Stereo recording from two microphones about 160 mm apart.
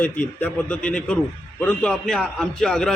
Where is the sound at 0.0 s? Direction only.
10° left (ahead or behind).